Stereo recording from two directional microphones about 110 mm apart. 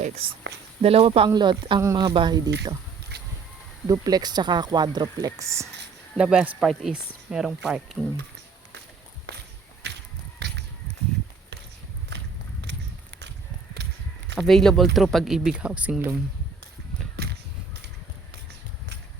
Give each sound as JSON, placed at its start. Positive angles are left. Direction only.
{"t": 0.0, "sound": "speech", "side_deg": -65}
{"t": 1.3, "sound": "speech", "side_deg": -45}
{"t": 1.8, "sound": "speech", "side_deg": -30}
{"t": 2.1, "sound": "speech", "side_deg": -40}
{"t": 3.8, "sound": "speech", "side_deg": -35}
{"t": 6.1, "sound": "speech", "side_deg": -10}
{"t": 14.3, "sound": "speech", "side_deg": 5}